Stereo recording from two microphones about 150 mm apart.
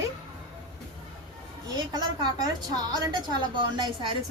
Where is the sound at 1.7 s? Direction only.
25° right (ahead or behind).